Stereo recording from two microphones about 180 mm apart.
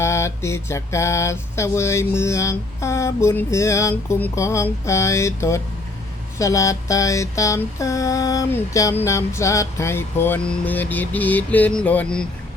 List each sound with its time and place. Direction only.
0.0 s mantra: 15° left (ahead or behind)